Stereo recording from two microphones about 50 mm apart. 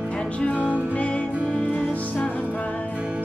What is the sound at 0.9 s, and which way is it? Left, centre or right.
Music, left.